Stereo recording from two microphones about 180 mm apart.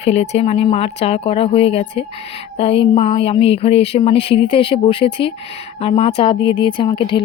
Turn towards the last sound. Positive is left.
turn(degrees=30)  # may be behind; listen again after turning